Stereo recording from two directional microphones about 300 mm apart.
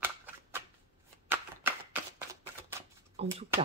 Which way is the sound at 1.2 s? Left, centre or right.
Centre.